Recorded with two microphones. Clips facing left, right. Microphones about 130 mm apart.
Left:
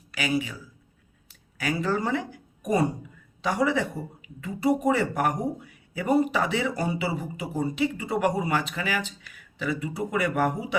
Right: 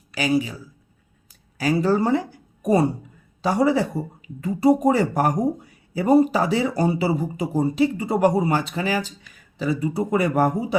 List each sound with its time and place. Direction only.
0.1 s speech: 35° right (ahead or behind)
1.5 s speech: 35° right (ahead or behind)